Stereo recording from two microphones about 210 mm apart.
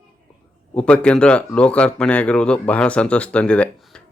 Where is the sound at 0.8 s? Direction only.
5° left (ahead or behind).